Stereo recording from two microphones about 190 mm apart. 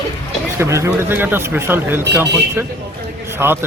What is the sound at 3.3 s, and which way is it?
Speech, 10° right (ahead or behind).